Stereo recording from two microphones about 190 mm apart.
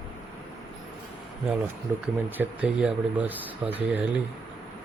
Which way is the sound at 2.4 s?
5° right (ahead or behind).